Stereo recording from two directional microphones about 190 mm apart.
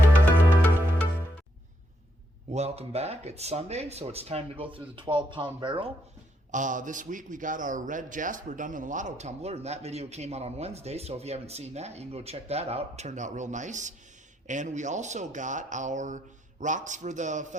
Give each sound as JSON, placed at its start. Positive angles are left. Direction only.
{"t": 2.5, "sound": "a man's voice", "side_deg": -35}
{"t": 6.5, "sound": "a man's voice", "side_deg": -40}